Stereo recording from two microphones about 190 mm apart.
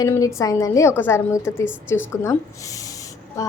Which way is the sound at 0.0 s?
15° left (ahead or behind).